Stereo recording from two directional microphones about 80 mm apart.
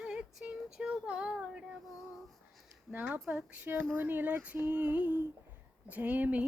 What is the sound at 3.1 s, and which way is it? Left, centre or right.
Speech, centre.